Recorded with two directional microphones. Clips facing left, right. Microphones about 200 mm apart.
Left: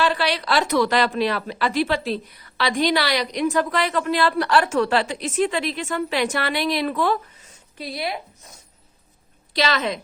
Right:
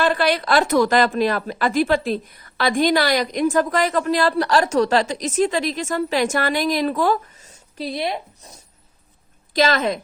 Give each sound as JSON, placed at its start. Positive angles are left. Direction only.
{"t": 0.0, "sound": "a woman's voice", "side_deg": -50}
{"t": 9.5, "sound": "a woman's voice", "side_deg": -50}